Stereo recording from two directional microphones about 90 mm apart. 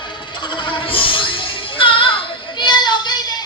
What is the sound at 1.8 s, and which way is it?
Music, 70° left (ahead or behind).